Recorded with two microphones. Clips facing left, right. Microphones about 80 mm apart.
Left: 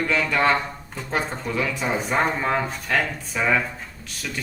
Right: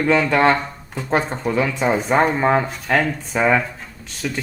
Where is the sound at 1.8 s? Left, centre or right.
Right.